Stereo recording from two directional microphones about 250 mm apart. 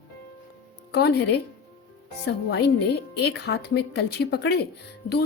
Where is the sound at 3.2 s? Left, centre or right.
Left.